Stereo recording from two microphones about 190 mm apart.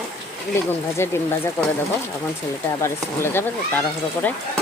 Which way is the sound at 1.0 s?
15° left (ahead or behind).